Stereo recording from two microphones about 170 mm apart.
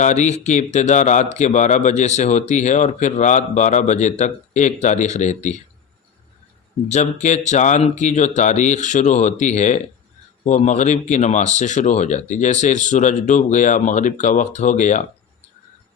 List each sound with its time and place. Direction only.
0.0 s speech: 45° left (ahead or behind)
6.8 s speech: 40° left (ahead or behind)